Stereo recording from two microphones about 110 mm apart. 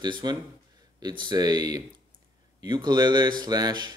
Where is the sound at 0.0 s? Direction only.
40° right (ahead or behind).